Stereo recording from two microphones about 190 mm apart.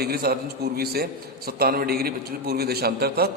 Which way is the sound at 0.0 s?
55° right (ahead or behind).